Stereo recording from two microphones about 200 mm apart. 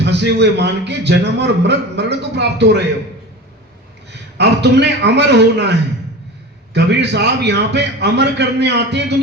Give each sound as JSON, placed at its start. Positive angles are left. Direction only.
{"t": 0.0, "sound": "a man's voice", "side_deg": -60}
{"t": 4.4, "sound": "a man's voice", "side_deg": -55}
{"t": 6.7, "sound": "a man's voice", "side_deg": -60}